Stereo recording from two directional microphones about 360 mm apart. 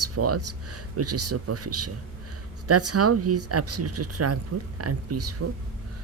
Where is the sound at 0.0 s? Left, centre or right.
Right.